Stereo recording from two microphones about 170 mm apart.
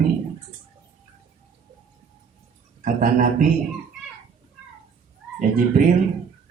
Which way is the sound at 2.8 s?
50° right (ahead or behind).